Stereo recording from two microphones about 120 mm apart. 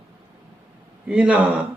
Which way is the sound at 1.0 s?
10° right (ahead or behind).